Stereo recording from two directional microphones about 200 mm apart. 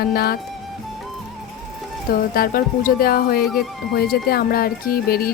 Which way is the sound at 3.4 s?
Centre (ahead or behind).